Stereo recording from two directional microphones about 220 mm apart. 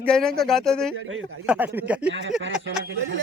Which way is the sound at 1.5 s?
10° right (ahead or behind).